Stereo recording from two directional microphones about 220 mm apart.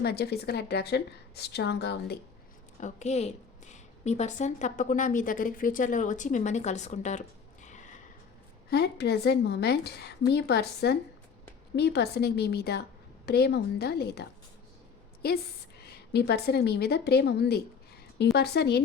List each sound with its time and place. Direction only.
0.0 s a woman's voice: 45° left (ahead or behind)
2.8 s a woman's voice: 30° left (ahead or behind)
8.7 s a woman's voice: 50° left (ahead or behind)